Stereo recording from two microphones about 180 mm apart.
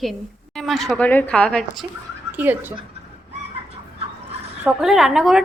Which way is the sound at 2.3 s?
10° right (ahead or behind).